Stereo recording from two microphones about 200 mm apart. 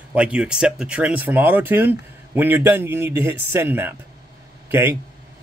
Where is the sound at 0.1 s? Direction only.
5° right (ahead or behind).